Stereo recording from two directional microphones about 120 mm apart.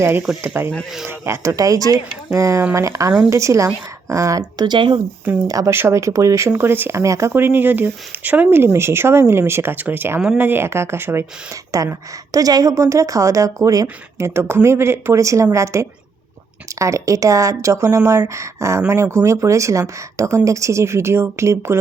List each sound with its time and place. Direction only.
0.0 s speech: 20° right (ahead or behind); by 4.9 s 40° right (ahead or behind)
5.5 s speech: 25° right (ahead or behind)